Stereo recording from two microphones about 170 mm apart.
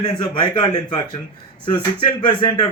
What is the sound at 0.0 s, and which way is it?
Speech, 25° left (ahead or behind).